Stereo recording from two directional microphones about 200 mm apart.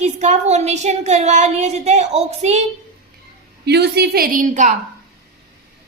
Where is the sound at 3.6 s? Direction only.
55° right (ahead or behind).